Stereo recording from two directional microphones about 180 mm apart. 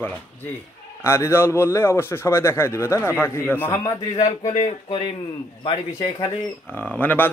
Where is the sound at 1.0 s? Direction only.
15° left (ahead or behind).